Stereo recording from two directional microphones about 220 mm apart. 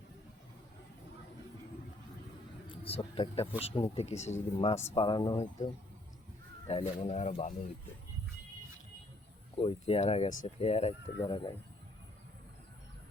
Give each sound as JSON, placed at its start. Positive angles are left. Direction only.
{"t": 2.6, "sound": "speech", "side_deg": 25}
{"t": 6.7, "sound": "speech", "side_deg": 25}
{"t": 9.6, "sound": "speech", "side_deg": 25}